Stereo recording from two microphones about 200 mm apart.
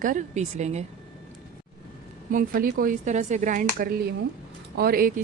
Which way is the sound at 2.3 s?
45° right (ahead or behind).